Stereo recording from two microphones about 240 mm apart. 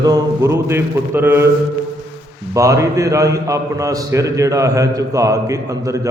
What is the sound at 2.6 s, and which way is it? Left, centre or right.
A man's voice, centre.